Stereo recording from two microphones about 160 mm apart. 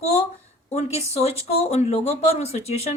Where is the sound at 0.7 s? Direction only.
40° left (ahead or behind).